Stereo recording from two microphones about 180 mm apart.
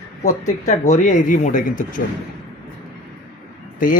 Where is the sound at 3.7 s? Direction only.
50° left (ahead or behind).